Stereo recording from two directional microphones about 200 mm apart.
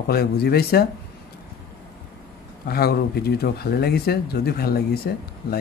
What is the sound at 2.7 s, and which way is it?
Speech, 50° left (ahead or behind).